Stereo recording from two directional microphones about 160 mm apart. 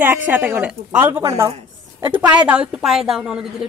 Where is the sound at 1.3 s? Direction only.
30° right (ahead or behind).